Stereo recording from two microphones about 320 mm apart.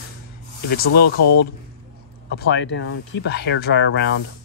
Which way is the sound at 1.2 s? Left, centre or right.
Left.